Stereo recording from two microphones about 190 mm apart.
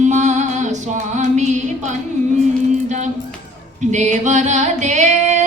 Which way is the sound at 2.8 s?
40° right (ahead or behind).